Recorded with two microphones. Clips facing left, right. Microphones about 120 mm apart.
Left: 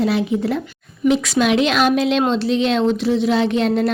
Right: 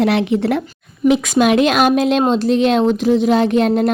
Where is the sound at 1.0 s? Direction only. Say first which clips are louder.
Right 3 dB; 55° right (ahead or behind).